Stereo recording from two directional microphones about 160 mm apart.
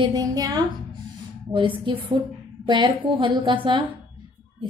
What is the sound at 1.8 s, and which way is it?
A woman's voice, 30° right (ahead or behind).